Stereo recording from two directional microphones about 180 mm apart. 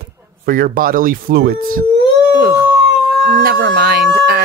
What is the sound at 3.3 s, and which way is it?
Speech, 70° right (ahead or behind).